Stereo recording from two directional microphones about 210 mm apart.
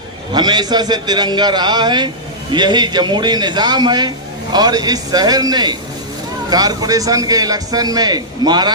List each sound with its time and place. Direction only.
0.3 s a man's voice: 20° right (ahead or behind)